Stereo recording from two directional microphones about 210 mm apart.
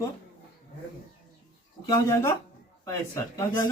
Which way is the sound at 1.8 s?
15° left (ahead or behind).